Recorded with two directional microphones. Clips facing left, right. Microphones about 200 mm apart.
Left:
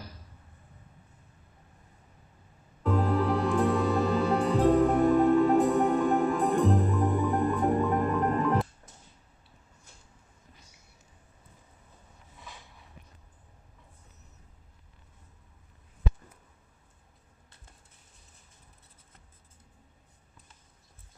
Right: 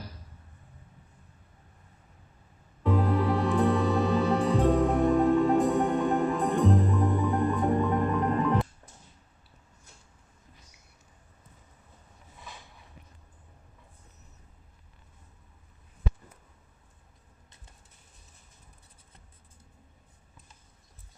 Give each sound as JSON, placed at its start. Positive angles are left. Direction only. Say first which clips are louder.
{"t": 2.8, "sound": "music", "louder": "right 1 dB", "side_deg": 0}